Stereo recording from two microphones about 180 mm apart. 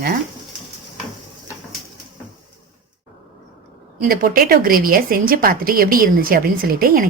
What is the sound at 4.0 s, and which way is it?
A woman's voice, 55° right (ahead or behind).